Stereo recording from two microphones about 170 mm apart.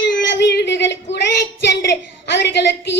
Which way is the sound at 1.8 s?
80° left.